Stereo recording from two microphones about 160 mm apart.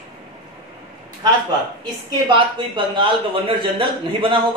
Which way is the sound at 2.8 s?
30° right (ahead or behind).